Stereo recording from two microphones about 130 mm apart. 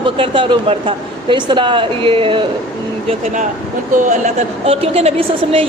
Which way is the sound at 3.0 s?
65° right (ahead or behind).